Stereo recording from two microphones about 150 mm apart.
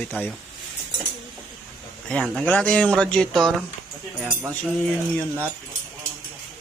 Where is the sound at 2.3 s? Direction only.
10° left (ahead or behind).